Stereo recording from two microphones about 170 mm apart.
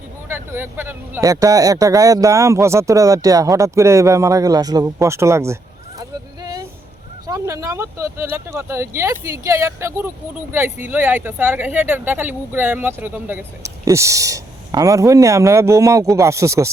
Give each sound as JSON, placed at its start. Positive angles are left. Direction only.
{"t": 0.3, "sound": "speech", "side_deg": -15}
{"t": 6.0, "sound": "vehicle", "side_deg": -25}
{"t": 7.3, "sound": "speech", "side_deg": -20}